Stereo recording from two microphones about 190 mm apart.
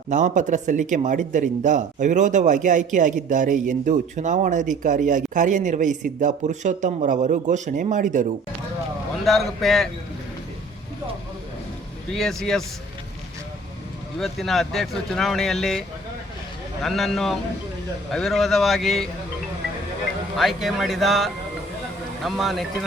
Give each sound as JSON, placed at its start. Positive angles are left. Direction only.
{"t": 0.1, "sound": "speech", "side_deg": -40}
{"t": 9.2, "sound": "speech", "side_deg": 0}
{"t": 12.1, "sound": "speech", "side_deg": 0}
{"t": 14.2, "sound": "speech", "side_deg": 0}
{"t": 16.8, "sound": "speech", "side_deg": 0}
{"t": 20.3, "sound": "speech", "side_deg": 0}